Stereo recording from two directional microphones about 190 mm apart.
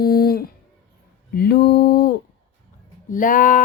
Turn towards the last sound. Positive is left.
turn(degrees=45)  # may be behind; listen again after turning